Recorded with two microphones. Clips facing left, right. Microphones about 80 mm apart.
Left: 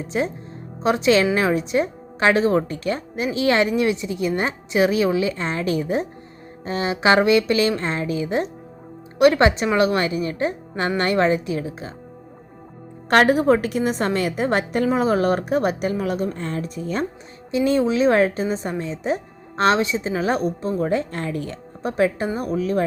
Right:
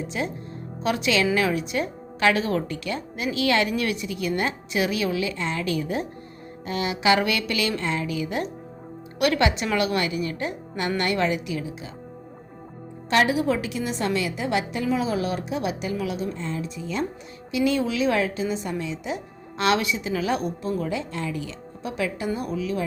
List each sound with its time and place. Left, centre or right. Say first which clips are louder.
0.1 s a woman's voice: left 9 dB; left
13.1 s a woman's voice: left 6 dB; left